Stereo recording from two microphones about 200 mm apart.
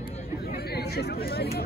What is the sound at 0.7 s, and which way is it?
Speech, 55° left (ahead or behind).